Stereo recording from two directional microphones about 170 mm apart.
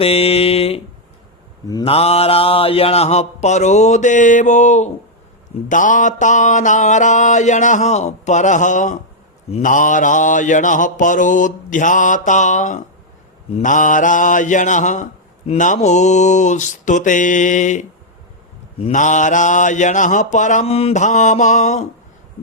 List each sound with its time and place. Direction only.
0.0 s mantra: 35° left (ahead or behind)
1.8 s mantra: 35° left (ahead or behind)